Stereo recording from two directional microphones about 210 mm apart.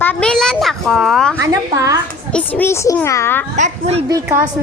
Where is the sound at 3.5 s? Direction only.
30° right (ahead or behind).